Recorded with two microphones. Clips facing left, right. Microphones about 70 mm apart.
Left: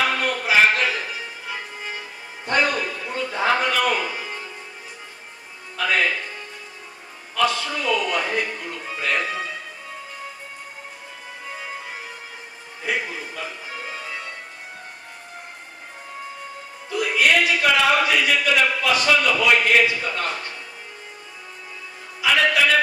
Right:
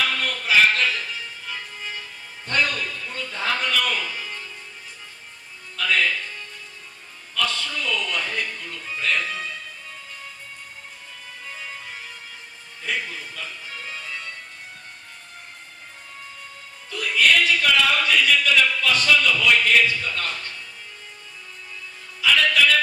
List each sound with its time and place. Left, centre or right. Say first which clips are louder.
0.0 s music: left 3 dB; left
2.5 s a sound: left 3 dB; left
5.7 s music: left 1 dB; left
11.4 s music: left 4 dB; left
16.9 s a sound: left 1 dB; centre
22.2 s music: left 1 dB; left